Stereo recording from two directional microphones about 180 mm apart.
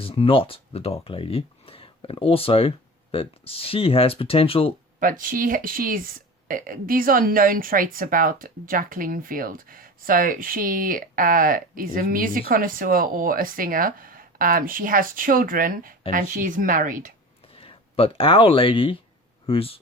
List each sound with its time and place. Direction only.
0.0 s speech: 30° left (ahead or behind)
4.9 s speech: 50° right (ahead or behind)
17.5 s speech: 30° left (ahead or behind)